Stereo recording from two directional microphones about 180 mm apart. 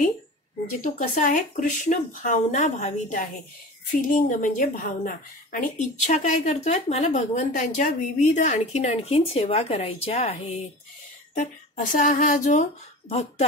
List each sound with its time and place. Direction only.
0.9 s a woman's voice: 45° left (ahead or behind)